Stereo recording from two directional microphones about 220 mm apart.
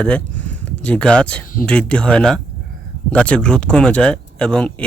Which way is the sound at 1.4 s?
40° left (ahead or behind).